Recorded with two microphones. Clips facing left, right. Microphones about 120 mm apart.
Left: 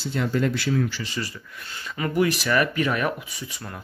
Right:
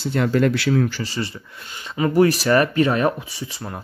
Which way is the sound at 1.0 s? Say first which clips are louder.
Right 4 dB; 30° right (ahead or behind).